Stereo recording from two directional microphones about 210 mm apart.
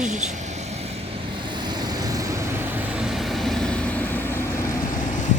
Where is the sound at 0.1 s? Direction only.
35° right (ahead or behind); by 4.8 s 15° left (ahead or behind).